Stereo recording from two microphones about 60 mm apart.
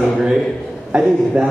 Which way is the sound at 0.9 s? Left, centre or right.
Centre.